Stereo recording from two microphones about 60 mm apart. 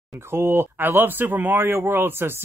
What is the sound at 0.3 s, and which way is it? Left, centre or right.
Speech, right.